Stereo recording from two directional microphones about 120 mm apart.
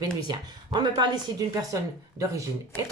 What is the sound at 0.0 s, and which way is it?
Speech, 35° right (ahead or behind).